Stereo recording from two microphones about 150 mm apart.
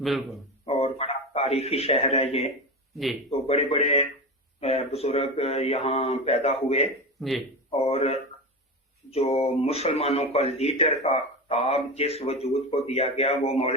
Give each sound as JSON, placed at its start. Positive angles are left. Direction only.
{"t": 0.6, "sound": "a sound", "side_deg": 40}
{"t": 3.2, "sound": "speech", "side_deg": 40}
{"t": 7.2, "sound": "speech", "side_deg": 0}
{"t": 7.7, "sound": "speech", "side_deg": 40}